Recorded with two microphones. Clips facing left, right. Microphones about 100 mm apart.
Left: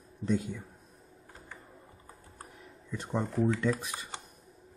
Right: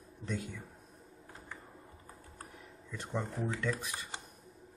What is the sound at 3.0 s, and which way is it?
Speech, 20° left (ahead or behind).